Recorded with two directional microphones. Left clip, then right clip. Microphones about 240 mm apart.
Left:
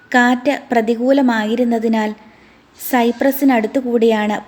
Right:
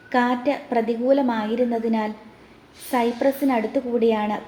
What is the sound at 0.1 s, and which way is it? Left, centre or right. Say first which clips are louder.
A woman's voice: left 7 dB; left.